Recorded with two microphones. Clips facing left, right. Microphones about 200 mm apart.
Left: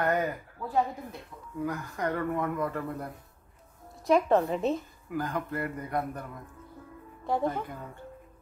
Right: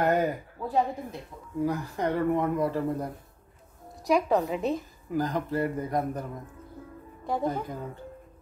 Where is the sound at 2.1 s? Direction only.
15° right (ahead or behind).